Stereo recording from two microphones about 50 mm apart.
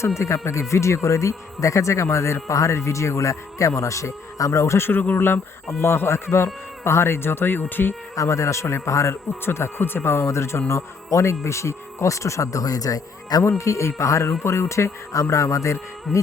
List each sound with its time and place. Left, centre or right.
0.2 s speech: left
4.8 s speech: left
5.8 s speech: left
8.1 s speech: left
8.6 s a man's voice: left
9.5 s speech: left
13.6 s speech: left
14.4 s speech: left